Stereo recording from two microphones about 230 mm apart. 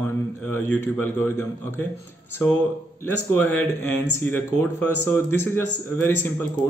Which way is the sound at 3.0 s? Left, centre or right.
Centre.